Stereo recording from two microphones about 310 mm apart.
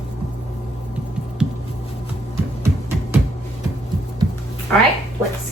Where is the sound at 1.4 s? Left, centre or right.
Centre.